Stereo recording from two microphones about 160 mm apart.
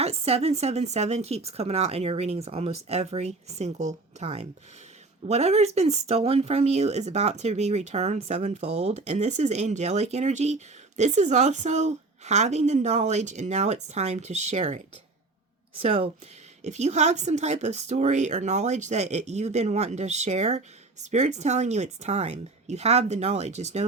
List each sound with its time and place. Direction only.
0.0 s speech: 40° right (ahead or behind)
15.8 s speech: 35° right (ahead or behind)